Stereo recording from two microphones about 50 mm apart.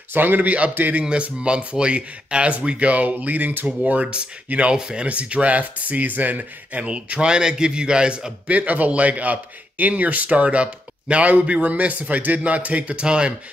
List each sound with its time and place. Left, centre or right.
0.1 s a man's voice: right
1.0 s a man's voice: right
8.5 s a man's voice: right